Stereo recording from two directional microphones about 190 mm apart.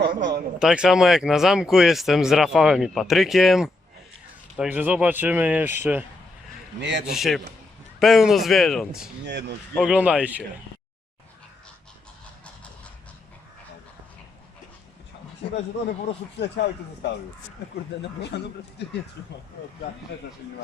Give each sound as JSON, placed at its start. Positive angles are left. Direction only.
{"t": 0.0, "sound": "speech", "side_deg": -65}
{"t": 0.6, "sound": "speech", "side_deg": -5}
{"t": 6.7, "sound": "speech", "side_deg": -65}
{"t": 7.1, "sound": "speech", "side_deg": 0}
{"t": 9.2, "sound": "speech", "side_deg": -65}
{"t": 9.8, "sound": "speech", "side_deg": -5}
{"t": 16.4, "sound": "speech", "side_deg": 65}
{"t": 18.3, "sound": "speech", "side_deg": 60}